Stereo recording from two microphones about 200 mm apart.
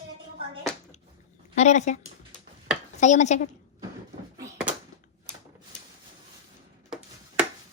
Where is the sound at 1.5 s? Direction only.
35° left (ahead or behind).